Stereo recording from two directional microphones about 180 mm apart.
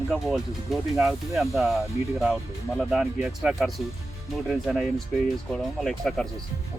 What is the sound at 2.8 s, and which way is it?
Speech, 5° right (ahead or behind).